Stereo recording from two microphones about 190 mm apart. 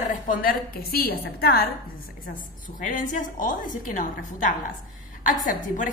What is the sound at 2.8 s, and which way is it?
A woman's voice, 45° left (ahead or behind).